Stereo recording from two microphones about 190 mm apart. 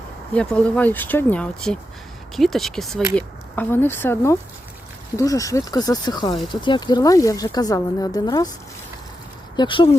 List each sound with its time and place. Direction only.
0.3 s speech: 5° left (ahead or behind)
9.6 s speech: 25° left (ahead or behind)